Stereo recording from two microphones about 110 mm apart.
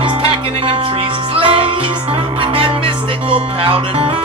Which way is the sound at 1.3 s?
55° right (ahead or behind).